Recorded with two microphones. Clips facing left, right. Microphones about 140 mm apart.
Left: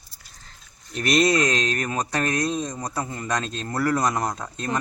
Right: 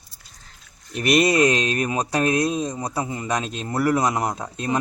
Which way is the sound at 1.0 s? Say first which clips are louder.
Right 2 dB; 10° right (ahead or behind).